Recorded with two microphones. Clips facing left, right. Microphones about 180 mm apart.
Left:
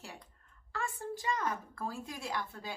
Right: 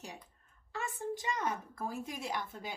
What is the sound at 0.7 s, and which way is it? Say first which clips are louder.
A woman's voice: right 1 dB; 20° right (ahead or behind).